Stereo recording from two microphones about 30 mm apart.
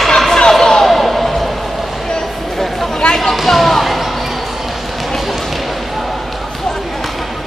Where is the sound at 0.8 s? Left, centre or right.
Centre.